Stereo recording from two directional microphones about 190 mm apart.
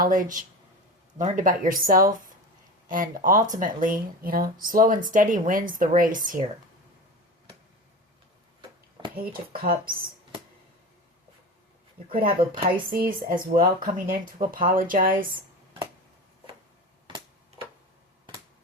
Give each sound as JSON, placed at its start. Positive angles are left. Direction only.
{"t": 0.0, "sound": "speech", "side_deg": -45}
{"t": 9.1, "sound": "speech", "side_deg": -50}
{"t": 12.0, "sound": "speech", "side_deg": -50}